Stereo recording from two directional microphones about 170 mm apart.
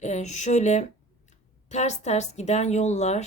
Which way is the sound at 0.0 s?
45° left (ahead or behind).